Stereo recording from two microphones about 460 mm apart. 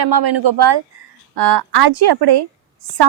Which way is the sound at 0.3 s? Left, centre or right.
Right.